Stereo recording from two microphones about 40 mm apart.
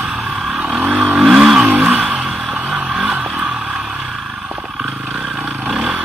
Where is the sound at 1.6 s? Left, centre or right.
Right.